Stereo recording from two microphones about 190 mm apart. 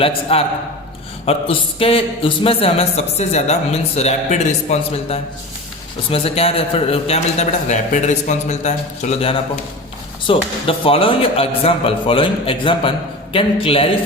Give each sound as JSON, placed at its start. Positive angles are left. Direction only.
{"t": 0.0, "sound": "a man's voice", "side_deg": 30}